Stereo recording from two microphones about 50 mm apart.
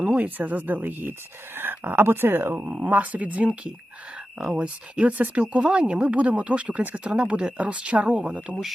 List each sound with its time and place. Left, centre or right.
0.0 s speech: right
2.6 s speech: right